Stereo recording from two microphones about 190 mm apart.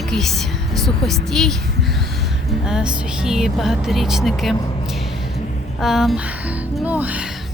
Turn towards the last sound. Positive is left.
turn(degrees=-10)  # may be behind; listen again after turning